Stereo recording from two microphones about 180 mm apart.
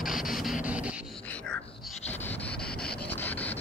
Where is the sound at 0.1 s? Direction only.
Centre (ahead or behind).